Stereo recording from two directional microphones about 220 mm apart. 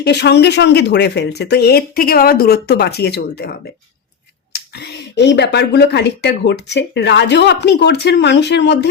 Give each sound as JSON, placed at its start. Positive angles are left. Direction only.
{"t": 0.0, "sound": "speech", "side_deg": 50}
{"t": 4.5, "sound": "speech", "side_deg": 45}